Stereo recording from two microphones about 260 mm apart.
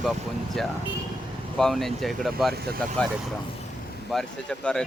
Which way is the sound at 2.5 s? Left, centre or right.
Right.